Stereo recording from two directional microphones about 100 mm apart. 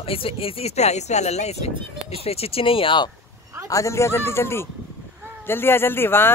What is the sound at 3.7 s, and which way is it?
Speech, 30° left (ahead or behind).